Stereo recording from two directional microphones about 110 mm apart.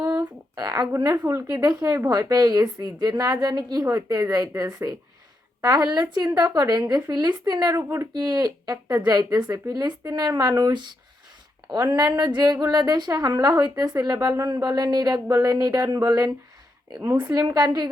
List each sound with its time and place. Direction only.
0.0 s a sound: 15° right (ahead or behind)
0.5 s a woman's voice: 35° right (ahead or behind)
7.8 s speech: 25° right (ahead or behind)
8.1 s a woman's voice: 40° right (ahead or behind)